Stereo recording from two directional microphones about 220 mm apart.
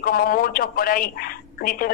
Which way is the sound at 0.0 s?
40° left (ahead or behind).